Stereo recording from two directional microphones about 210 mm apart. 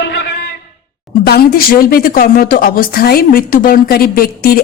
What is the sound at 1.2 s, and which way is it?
Speech, 45° left (ahead or behind).